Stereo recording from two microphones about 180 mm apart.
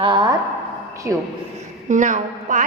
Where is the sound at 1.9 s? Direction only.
45° right (ahead or behind).